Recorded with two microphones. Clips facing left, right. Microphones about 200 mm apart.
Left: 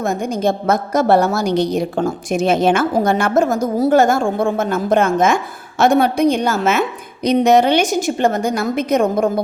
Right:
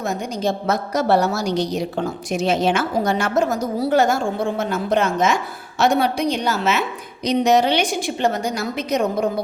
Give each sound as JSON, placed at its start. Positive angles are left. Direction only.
{"t": 0.0, "sound": "a woman's voice", "side_deg": 50}